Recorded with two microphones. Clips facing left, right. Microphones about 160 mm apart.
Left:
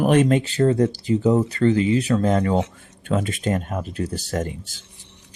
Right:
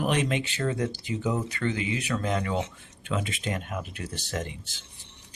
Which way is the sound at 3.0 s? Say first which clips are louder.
Left 8 dB; 45° left (ahead or behind).